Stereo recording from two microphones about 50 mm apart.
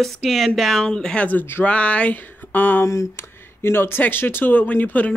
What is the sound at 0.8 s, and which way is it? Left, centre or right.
Speech, centre.